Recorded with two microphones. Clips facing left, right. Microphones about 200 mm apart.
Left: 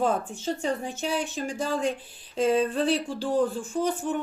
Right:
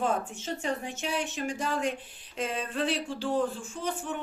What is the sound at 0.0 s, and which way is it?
Speech, 35° left (ahead or behind).